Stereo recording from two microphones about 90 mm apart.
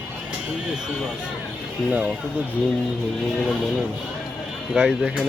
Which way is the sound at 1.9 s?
15° right (ahead or behind).